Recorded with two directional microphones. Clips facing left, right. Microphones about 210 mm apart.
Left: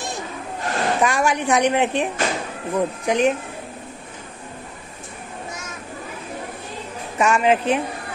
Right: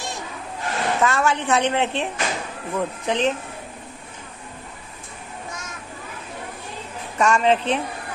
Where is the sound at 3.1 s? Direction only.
10° left (ahead or behind).